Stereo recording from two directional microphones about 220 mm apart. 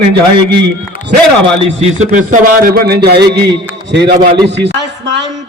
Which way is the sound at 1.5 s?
30° right (ahead or behind).